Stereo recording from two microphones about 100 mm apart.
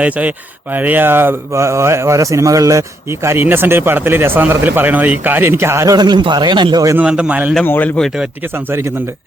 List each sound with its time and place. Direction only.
0.0 s speech: 15° right (ahead or behind); by 2.8 s 35° right (ahead or behind)
3.2 s a man's voice: 20° right (ahead or behind); by 6.8 s 50° right (ahead or behind)
6.9 s a man's voice: 10° right (ahead or behind)
7.6 s speech: 20° left (ahead or behind)